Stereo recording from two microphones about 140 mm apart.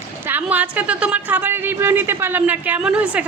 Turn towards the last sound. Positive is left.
turn(degrees=-10)  # may be behind; listen again after turning